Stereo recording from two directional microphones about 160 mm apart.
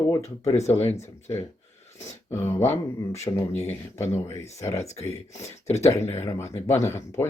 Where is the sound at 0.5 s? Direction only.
45° left (ahead or behind).